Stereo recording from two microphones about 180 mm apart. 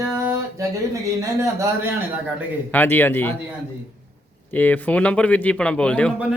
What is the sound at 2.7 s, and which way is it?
Speech, 10° left (ahead or behind).